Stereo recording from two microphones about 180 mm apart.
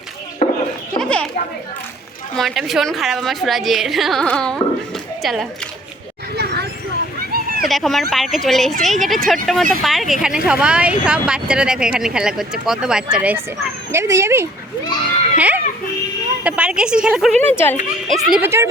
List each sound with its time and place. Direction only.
0.4 s a sound: 45° left (ahead or behind)
0.9 s a sound: 5° left (ahead or behind)
2.3 s a woman's voice: centre (ahead or behind)
6.3 s vehicle: 65° right (ahead or behind)
7.3 s a sound: 55° right (ahead or behind)
7.7 s speech: centre (ahead or behind); by 14.4 s 15° right (ahead or behind)
15.4 s children playing: 10° right (ahead or behind)
16.4 s speech: 5° right (ahead or behind)
17.4 s speech: 10° left (ahead or behind)
18.1 s speech: 5° right (ahead or behind)
18.4 s speech: 15° right (ahead or behind)